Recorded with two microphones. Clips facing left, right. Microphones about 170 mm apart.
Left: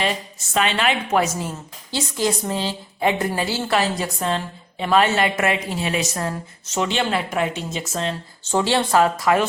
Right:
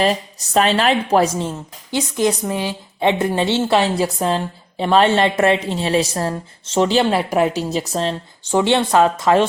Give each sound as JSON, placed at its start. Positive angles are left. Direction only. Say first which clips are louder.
{"t": 0.0, "sound": "a woman's voice", "louder": "right 6 dB", "side_deg": -40}
{"t": 1.9, "sound": "speech", "louder": "right 4 dB", "side_deg": -20}
{"t": 8.4, "sound": "speech", "louder": "right 4 dB", "side_deg": -20}